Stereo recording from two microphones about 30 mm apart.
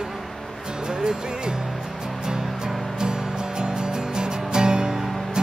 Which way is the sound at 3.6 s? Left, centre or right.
Right.